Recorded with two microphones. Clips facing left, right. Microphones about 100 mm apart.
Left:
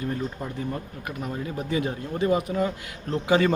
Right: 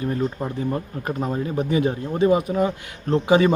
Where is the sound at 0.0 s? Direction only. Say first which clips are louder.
Right 5 dB; 25° right (ahead or behind).